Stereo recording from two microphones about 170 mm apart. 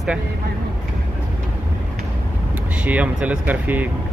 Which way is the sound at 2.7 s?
10° right (ahead or behind).